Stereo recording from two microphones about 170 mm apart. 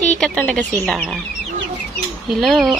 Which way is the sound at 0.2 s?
5° left (ahead or behind).